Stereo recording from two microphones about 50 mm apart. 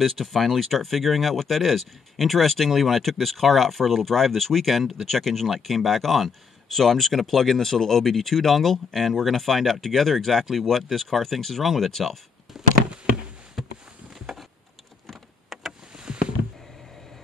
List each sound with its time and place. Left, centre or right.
0.0 s speech: centre
13.6 s a sound: centre
15.0 s typing: centre
15.9 s rowboat: centre